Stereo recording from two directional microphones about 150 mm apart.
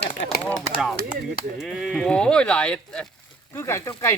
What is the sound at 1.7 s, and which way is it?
Speech, centre (ahead or behind).